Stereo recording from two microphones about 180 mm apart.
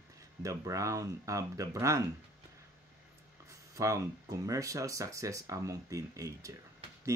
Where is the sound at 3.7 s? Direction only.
15° right (ahead or behind).